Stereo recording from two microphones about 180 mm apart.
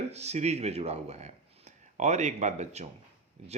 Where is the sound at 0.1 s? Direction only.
35° right (ahead or behind).